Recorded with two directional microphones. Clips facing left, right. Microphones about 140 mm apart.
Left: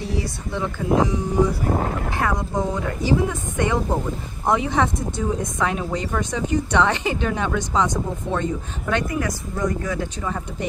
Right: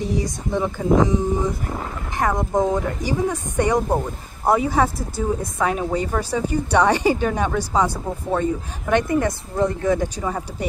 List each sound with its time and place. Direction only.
0.0 s speech: 15° right (ahead or behind)
1.6 s speech: 45° left (ahead or behind)
2.1 s speech: 20° right (ahead or behind)
9.9 s speech: 15° right (ahead or behind)